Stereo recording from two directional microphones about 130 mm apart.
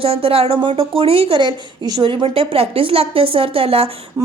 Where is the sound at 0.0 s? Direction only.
45° right (ahead or behind).